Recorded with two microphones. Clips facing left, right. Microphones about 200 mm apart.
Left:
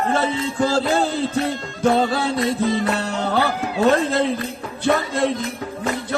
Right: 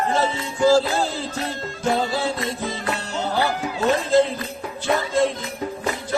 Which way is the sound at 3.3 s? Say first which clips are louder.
Left 1 dB; 60° left (ahead or behind).